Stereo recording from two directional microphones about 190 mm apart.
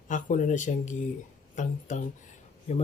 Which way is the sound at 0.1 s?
40° left (ahead or behind).